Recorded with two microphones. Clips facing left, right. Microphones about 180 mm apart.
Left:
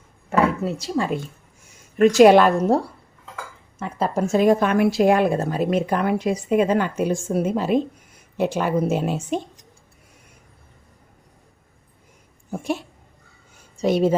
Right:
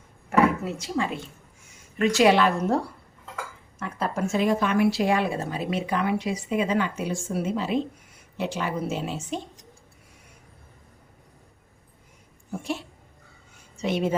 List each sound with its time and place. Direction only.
0.3 s speech: 30° left (ahead or behind)
2.0 s a woman's voice: 45° left (ahead or behind)
3.8 s a woman's voice: 30° left (ahead or behind); by 9.4 s 50° left (ahead or behind)
12.5 s a sound: 50° left (ahead or behind)
13.7 s speech: 40° left (ahead or behind)